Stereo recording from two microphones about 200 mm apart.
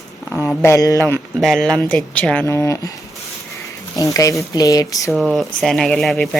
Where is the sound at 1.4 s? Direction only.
Centre (ahead or behind).